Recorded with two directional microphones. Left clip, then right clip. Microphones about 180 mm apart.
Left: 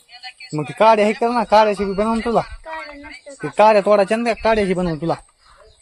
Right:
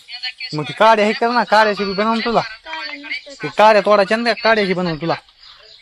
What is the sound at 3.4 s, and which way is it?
A man's voice, 5° left (ahead or behind).